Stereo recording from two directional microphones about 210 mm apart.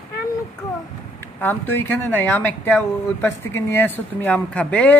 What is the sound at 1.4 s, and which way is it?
Speech, 10° left (ahead or behind).